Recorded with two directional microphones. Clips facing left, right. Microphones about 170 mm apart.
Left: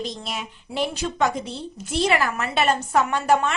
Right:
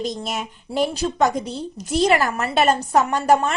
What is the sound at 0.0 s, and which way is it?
A woman's voice, 45° right (ahead or behind).